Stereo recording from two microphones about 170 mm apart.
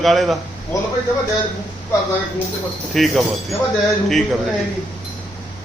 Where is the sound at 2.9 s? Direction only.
Centre (ahead or behind).